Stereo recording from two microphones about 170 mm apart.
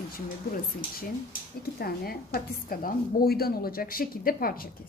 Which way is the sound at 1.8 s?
60° left (ahead or behind).